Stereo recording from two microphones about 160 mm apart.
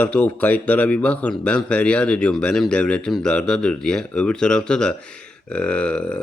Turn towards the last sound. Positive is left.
turn(degrees=5)  # may be behind; listen again after turning